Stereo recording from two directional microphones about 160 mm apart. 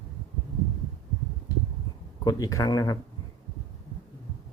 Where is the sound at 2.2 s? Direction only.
20° left (ahead or behind).